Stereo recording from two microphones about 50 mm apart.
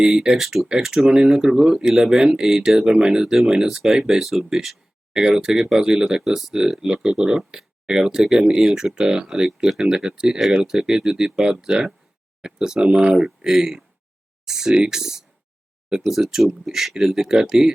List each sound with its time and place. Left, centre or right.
0.0 s speech: centre